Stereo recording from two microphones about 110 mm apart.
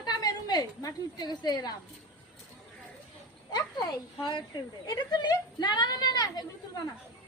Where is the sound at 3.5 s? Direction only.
40° left (ahead or behind).